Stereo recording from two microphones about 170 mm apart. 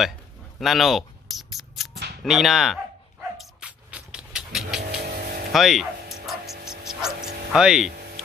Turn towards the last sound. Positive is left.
turn(degrees=-5)  # may be behind; listen again after turning